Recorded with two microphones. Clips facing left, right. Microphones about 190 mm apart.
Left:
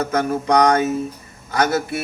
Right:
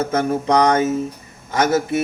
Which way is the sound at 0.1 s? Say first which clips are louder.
Right 1 dB; 25° right (ahead or behind).